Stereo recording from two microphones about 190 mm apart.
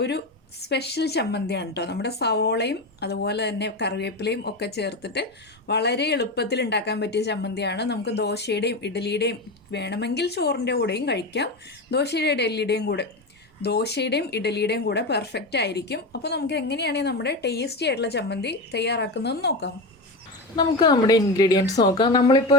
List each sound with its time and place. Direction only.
0.7 s a woman's voice: 60° left (ahead or behind)
20.6 s a woman's voice: 20° left (ahead or behind)